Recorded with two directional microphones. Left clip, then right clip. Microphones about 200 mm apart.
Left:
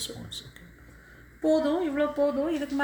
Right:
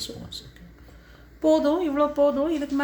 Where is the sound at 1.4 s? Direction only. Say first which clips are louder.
Right 4 dB; 35° right (ahead or behind).